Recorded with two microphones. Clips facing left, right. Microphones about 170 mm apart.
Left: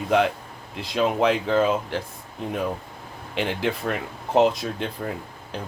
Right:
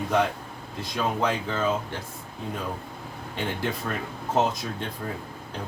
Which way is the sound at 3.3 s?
90° left.